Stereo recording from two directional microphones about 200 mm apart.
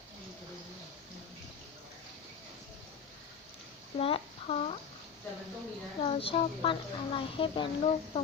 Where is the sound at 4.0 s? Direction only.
30° left (ahead or behind).